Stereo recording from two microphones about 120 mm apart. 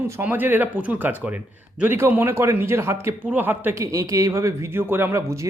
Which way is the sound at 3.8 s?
30° right (ahead or behind).